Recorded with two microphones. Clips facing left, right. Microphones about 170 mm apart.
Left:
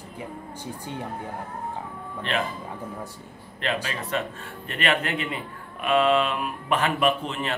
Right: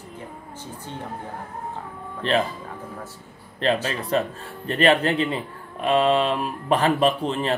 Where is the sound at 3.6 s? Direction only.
35° right (ahead or behind).